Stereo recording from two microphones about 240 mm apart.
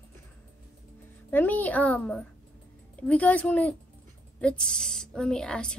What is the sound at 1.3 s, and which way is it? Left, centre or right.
A woman's voice, centre.